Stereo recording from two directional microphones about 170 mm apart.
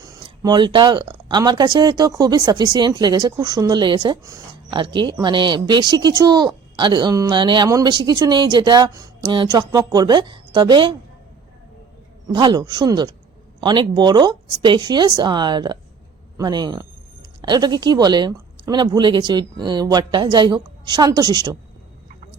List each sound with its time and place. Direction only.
0.0 s speech: 20° right (ahead or behind)
12.3 s speech: 25° right (ahead or behind)